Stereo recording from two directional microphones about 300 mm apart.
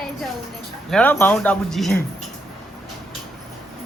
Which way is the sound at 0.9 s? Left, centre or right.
Centre.